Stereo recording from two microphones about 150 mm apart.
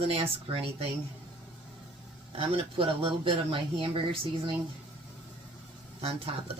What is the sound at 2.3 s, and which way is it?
Speech, 35° right (ahead or behind).